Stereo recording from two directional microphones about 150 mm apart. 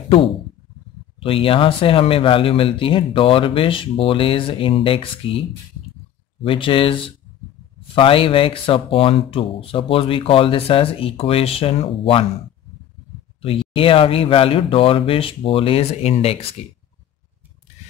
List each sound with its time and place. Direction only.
1.2 s speech: 40° left (ahead or behind)
6.4 s speech: 35° left (ahead or behind)
13.4 s speech: 35° left (ahead or behind)